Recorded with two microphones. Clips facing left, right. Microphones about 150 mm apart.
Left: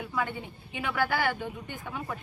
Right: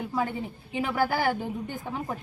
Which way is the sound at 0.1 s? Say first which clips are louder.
Right 2 dB; 35° right (ahead or behind).